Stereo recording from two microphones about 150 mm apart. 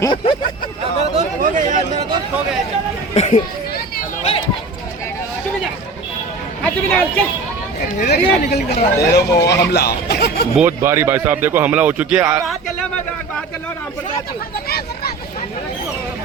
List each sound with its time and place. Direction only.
0.0 s speech: 30° left (ahead or behind)
1.1 s chatter: 50° right (ahead or behind)
3.2 s children playing: 50° left (ahead or behind)
6.6 s a sound: 10° left (ahead or behind)
8.1 s speech: 90° left
10.6 s a man's voice: 15° right (ahead or behind)
14.5 s vehicle: 90° left